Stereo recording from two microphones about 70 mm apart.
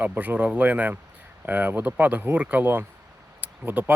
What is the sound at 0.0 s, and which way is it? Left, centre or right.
Speech, right.